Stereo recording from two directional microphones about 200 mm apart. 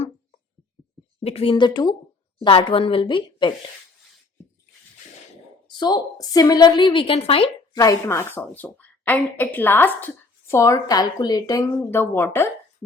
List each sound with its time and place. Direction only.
1.2 s a woman's voice: 30° left (ahead or behind)
5.6 s a woman's voice: 20° left (ahead or behind)